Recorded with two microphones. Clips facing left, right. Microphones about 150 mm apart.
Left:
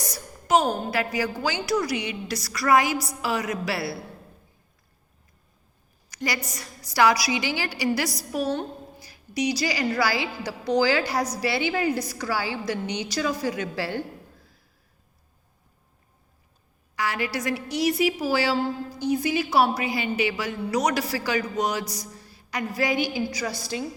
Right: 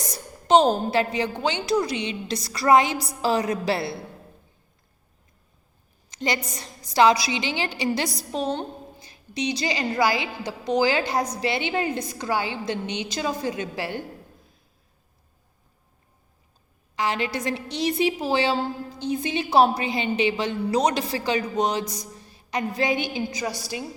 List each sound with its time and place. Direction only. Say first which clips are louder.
0.0 s a woman's voice: right 1 dB; 25° right (ahead or behind)
6.1 s a sound: right 3 dB; 25° right (ahead or behind)
6.5 s a woman's voice: right 3 dB; 25° right (ahead or behind)
16.9 s a woman's voice: right 2 dB; 25° right (ahead or behind)